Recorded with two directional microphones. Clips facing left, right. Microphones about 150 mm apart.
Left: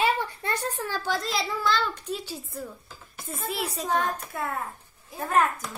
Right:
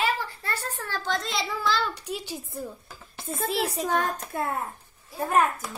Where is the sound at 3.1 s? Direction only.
90° right.